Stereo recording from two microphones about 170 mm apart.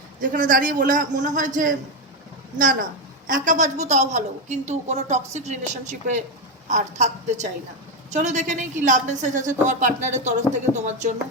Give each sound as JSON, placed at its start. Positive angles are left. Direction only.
{"t": 0.2, "sound": "a woman's voice", "side_deg": -50}
{"t": 3.2, "sound": "a woman's voice", "side_deg": -50}